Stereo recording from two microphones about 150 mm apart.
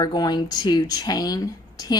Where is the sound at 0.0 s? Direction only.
25° left (ahead or behind).